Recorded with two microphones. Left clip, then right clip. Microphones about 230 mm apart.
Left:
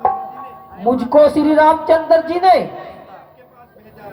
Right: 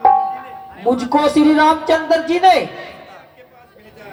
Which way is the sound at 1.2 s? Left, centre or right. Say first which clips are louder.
Left 1 dB; right.